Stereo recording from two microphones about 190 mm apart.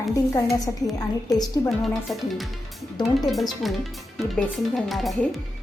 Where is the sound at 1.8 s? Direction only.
Centre (ahead or behind).